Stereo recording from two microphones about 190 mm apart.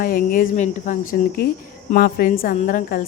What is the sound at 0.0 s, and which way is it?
A woman's voice, 50° left (ahead or behind).